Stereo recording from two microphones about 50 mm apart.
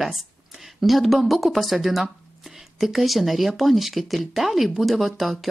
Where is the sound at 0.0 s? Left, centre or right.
Centre.